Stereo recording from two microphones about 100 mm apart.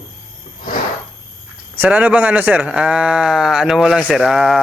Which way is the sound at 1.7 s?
15° right (ahead or behind).